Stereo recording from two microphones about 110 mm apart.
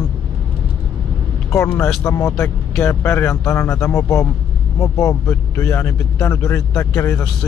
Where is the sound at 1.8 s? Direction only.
30° left (ahead or behind).